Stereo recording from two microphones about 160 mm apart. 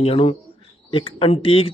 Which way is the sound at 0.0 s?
40° left (ahead or behind).